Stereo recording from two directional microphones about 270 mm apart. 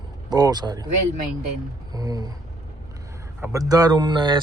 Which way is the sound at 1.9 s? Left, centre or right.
Centre.